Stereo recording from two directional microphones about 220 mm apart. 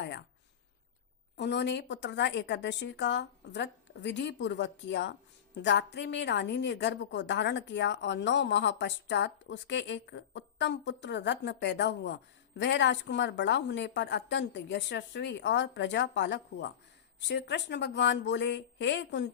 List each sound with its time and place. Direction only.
1.4 s a woman's voice: 50° left (ahead or behind)